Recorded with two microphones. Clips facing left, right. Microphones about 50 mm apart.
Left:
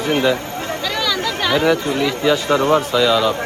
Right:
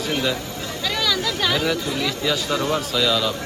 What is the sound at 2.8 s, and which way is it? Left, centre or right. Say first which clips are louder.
Speech: left 6 dB; centre.